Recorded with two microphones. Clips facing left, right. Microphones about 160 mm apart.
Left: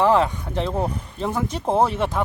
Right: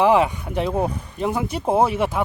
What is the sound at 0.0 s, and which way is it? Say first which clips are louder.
Speech: right 1 dB; 15° right (ahead or behind).